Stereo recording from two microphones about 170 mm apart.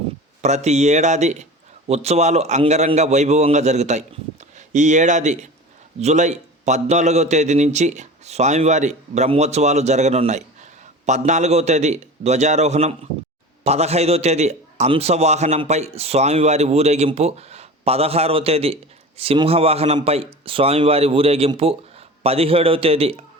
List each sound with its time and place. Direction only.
0.4 s a man's voice: 40° right (ahead or behind)